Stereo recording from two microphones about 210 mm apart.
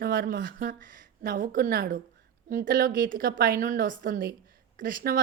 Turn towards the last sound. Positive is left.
turn(degrees=-45)  # may be behind; listen again after turning